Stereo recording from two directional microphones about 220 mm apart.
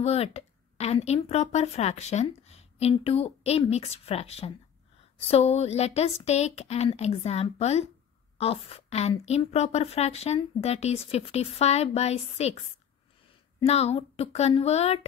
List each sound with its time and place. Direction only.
0.0 s speech: 30° left (ahead or behind)